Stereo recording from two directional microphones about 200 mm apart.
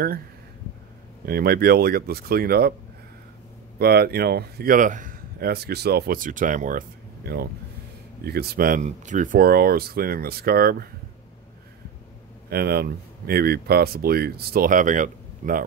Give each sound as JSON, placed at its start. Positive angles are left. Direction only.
{"t": 1.2, "sound": "speech", "side_deg": -50}
{"t": 3.7, "sound": "speech", "side_deg": -50}
{"t": 7.2, "sound": "speech", "side_deg": -50}
{"t": 12.4, "sound": "speech", "side_deg": -50}